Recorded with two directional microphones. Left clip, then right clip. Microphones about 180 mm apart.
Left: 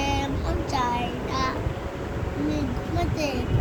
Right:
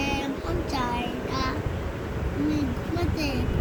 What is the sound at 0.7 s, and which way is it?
Child singing, 10° left (ahead or behind).